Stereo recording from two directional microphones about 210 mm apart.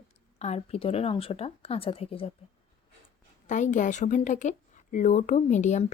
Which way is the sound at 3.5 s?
35° left (ahead or behind).